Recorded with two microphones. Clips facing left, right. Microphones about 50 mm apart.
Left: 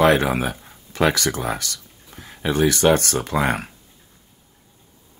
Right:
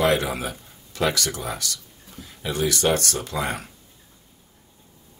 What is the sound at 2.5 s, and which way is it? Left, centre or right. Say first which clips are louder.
Speech: left 5 dB; left.